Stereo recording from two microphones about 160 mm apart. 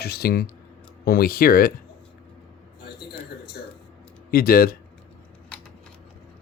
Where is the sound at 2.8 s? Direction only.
85° left.